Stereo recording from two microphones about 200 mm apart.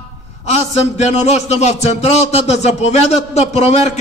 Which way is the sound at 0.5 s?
35° left (ahead or behind).